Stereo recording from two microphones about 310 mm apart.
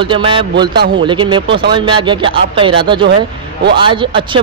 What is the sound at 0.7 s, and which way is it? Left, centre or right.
Speech, right.